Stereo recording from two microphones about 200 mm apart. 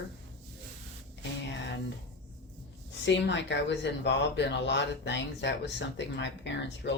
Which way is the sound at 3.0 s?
60° left (ahead or behind).